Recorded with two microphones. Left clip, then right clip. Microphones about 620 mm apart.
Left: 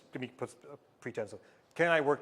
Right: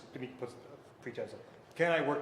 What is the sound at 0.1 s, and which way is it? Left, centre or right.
A man's voice, left.